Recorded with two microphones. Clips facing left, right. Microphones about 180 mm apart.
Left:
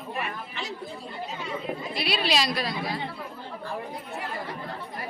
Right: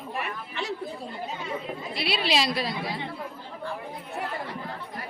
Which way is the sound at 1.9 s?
25° right (ahead or behind).